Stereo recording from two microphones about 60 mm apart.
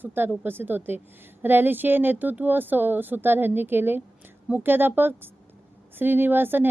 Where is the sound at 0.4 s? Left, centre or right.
Right.